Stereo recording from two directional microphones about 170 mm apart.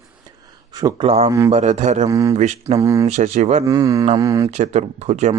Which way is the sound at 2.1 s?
20° right (ahead or behind).